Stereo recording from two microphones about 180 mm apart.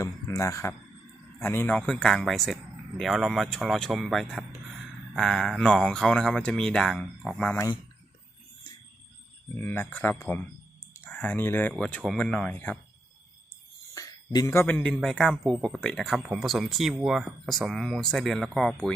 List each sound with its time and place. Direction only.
0.0 s a sound: 15° left (ahead or behind)
1.4 s a man's voice: 10° left (ahead or behind)
9.6 s a man's voice: 10° left (ahead or behind)
13.9 s a man's voice: 20° left (ahead or behind); by 18.8 s 5° left (ahead or behind)